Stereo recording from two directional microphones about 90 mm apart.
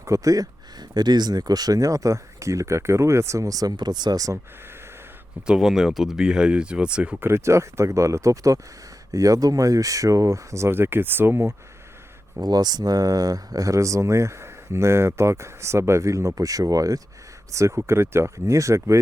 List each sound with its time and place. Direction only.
0.0 s speech: 40° right (ahead or behind)
5.5 s speech: 5° right (ahead or behind)
7.3 s speech: 30° right (ahead or behind)
12.4 s speech: 50° right (ahead or behind)